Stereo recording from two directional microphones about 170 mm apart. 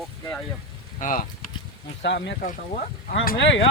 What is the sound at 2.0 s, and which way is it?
Speech, 90° left.